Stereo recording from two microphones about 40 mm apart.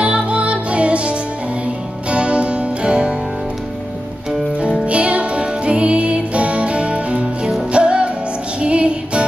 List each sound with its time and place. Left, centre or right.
0.0 s music: right
4.6 s music: right